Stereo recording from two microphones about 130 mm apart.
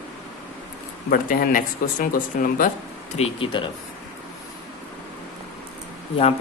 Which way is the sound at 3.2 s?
45° left (ahead or behind).